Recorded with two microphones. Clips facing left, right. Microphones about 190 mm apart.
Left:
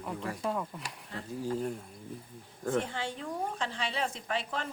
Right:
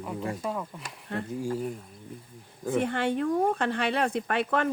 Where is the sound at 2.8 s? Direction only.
60° right (ahead or behind).